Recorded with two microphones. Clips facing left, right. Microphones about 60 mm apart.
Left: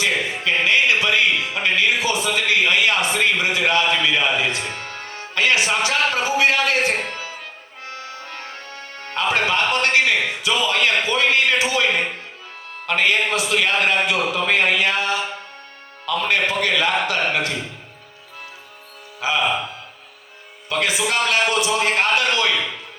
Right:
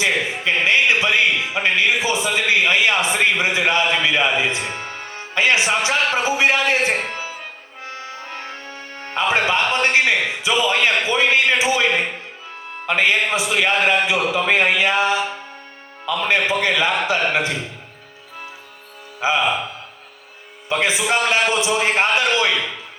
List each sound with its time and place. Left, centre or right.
0.0 s a man's voice: right
19.2 s a man's voice: right
20.7 s a man's voice: right